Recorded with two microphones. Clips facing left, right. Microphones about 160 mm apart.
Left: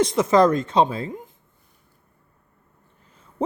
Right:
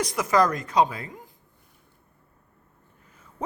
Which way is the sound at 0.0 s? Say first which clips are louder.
Left 6 dB; 25° left (ahead or behind).